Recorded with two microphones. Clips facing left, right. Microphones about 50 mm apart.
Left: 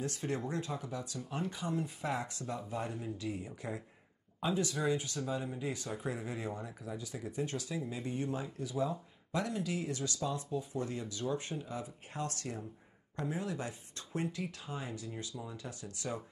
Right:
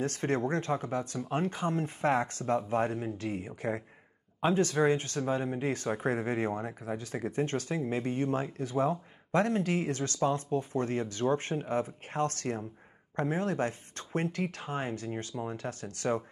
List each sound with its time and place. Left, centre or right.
0.0 s speech: right